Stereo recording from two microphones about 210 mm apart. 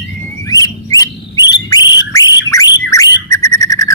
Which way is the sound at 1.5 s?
20° left (ahead or behind).